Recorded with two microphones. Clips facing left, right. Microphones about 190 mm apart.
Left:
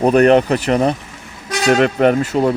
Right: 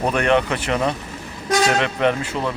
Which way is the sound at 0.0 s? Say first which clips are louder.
Left 8 dB; 40° left (ahead or behind).